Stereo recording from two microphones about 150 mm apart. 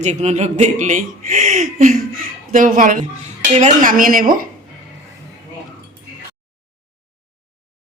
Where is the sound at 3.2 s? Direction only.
55° right (ahead or behind); by 4.4 s 70° right (ahead or behind).